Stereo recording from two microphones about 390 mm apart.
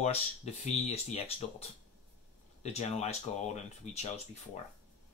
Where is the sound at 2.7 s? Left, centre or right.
Centre.